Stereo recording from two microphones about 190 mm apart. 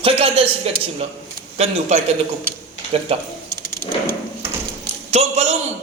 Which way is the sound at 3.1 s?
30° right (ahead or behind).